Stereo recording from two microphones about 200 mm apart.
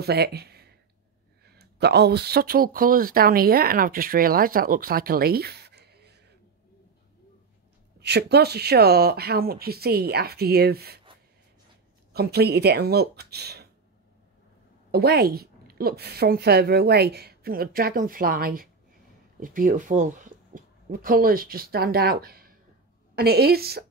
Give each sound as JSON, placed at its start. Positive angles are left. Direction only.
{"t": 0.0, "sound": "speech", "side_deg": -50}
{"t": 8.0, "sound": "a woman's voice", "side_deg": -55}
{"t": 12.1, "sound": "a woman's voice", "side_deg": -50}
{"t": 14.9, "sound": "a woman's voice", "side_deg": -50}